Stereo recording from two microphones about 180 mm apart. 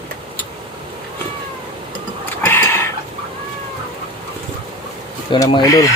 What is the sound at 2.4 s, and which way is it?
Tick-tock, 10° left (ahead or behind).